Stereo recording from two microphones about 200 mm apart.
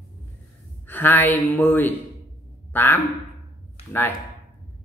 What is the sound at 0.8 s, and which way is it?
Speech, 10° left (ahead or behind).